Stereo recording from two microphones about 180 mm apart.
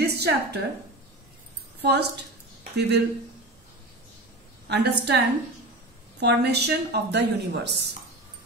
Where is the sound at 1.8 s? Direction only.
65° right (ahead or behind).